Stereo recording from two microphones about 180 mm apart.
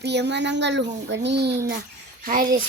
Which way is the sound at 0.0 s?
70° right (ahead or behind).